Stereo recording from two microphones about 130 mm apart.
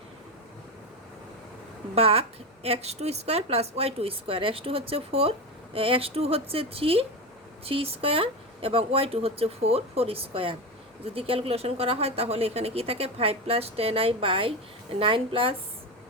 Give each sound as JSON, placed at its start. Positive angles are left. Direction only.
{"t": 2.0, "sound": "speech", "side_deg": -50}